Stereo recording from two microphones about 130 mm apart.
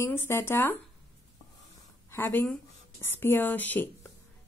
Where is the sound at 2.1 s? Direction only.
15° left (ahead or behind).